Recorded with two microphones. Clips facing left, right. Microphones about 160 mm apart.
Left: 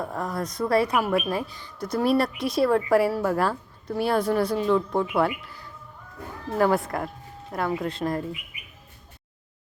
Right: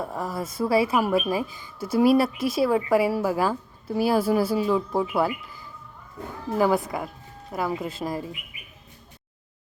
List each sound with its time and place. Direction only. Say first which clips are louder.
0.0 s a woman's voice: even; 5° right (ahead or behind)